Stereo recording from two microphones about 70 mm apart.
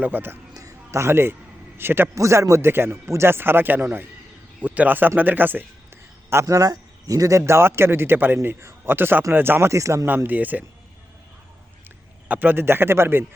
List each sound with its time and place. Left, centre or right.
0.0 s speech: right
0.5 s a sound: right
1.8 s speech: right
2.1 s speech: right
4.6 s speech: right
6.4 s speech: right
10.2 s speech: right
12.3 s speech: right